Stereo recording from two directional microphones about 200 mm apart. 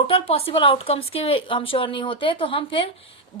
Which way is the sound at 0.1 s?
30° left (ahead or behind).